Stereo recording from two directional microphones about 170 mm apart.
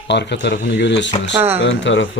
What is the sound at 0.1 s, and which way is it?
Speech, 90° left.